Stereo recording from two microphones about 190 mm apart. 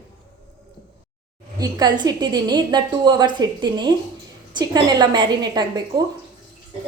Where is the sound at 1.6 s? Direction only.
20° right (ahead or behind).